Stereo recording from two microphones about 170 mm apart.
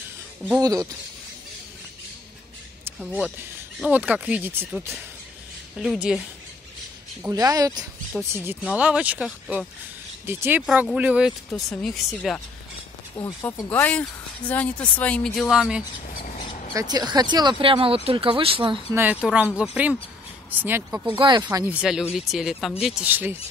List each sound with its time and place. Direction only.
0.6 s speech: 20° right (ahead or behind)
3.0 s speech: centre (ahead or behind)
7.2 s speech: 20° right (ahead or behind); by 12.4 s centre (ahead or behind)
13.2 s speech: 15° left (ahead or behind); by 15.8 s 5° right (ahead or behind)
16.7 s speech: 25° right (ahead or behind)
18.9 s speech: 10° right (ahead or behind)
21.2 s speech: 25° right (ahead or behind)
21.6 s speech: 5° right (ahead or behind)